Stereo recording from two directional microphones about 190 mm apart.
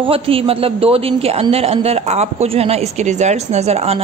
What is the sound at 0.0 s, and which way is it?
A woman's voice, 30° right (ahead or behind).